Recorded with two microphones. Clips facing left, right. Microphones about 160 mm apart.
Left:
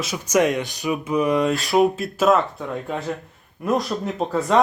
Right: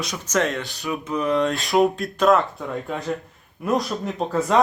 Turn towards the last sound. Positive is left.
turn(degrees=0)  # may be behind; listen again after turning